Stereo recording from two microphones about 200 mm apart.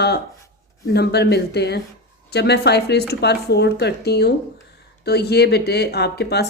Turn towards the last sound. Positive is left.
turn(degrees=55)  # may be behind; listen again after turning